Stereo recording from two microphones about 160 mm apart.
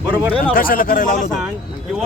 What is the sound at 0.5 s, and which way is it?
Speech, 65° left (ahead or behind).